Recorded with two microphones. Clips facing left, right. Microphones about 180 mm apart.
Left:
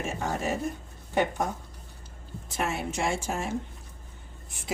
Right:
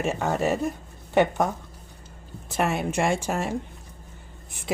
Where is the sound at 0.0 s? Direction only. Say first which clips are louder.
Right 6 dB; 65° right (ahead or behind).